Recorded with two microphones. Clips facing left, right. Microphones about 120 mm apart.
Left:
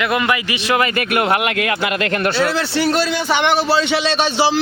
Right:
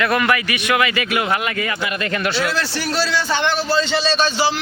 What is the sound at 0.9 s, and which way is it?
Speech, 55° left (ahead or behind).